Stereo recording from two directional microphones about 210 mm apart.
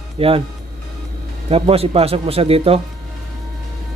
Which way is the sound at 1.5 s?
30° right (ahead or behind).